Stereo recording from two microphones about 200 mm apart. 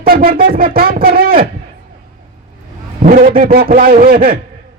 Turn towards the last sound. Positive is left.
turn(degrees=-45)  # may be behind; listen again after turning